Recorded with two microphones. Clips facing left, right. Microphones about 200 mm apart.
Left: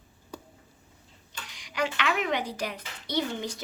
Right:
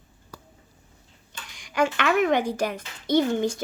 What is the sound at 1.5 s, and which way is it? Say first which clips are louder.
Speech: right 6 dB; 50° right (ahead or behind).